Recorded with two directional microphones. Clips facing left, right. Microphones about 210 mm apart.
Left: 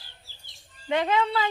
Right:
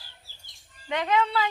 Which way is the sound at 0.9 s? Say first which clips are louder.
Left 1 dB; 30° left (ahead or behind).